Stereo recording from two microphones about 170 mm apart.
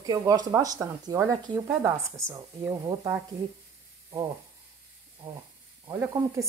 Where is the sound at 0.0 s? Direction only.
20° right (ahead or behind).